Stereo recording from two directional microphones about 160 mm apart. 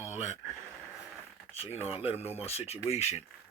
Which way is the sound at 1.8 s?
40° left (ahead or behind).